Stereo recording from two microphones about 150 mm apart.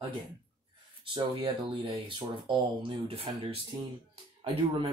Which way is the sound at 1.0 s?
35° right (ahead or behind).